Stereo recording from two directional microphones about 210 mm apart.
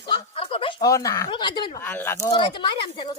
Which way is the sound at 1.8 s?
10° left (ahead or behind).